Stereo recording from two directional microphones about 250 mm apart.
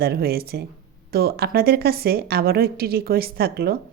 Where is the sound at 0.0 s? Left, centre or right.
Right.